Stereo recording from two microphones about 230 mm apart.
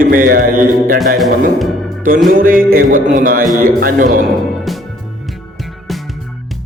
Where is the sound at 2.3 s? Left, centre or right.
Right.